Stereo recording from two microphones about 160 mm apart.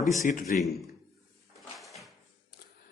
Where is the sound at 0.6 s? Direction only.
Centre (ahead or behind).